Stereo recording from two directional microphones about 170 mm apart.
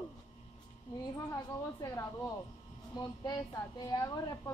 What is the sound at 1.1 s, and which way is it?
A woman's voice, 20° left (ahead or behind).